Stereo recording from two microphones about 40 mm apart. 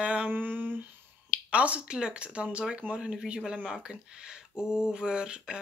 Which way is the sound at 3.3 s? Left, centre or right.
Right.